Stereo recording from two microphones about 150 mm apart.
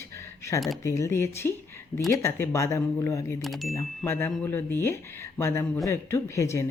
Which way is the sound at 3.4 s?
Centre (ahead or behind).